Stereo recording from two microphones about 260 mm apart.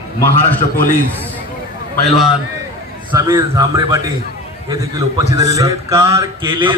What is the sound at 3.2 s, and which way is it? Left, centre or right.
Speech, centre.